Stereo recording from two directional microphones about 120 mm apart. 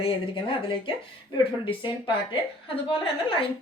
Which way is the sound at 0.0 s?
45° left (ahead or behind).